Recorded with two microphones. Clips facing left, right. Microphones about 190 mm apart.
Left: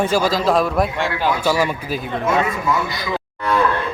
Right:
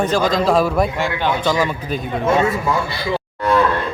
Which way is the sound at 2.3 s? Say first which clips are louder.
Right 2 dB; 30° right (ahead or behind).